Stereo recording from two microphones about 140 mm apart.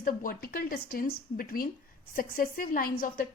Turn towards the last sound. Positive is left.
turn(degrees=90)